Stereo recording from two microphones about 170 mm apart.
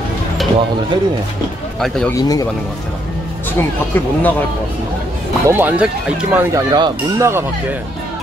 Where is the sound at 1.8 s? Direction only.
Centre (ahead or behind).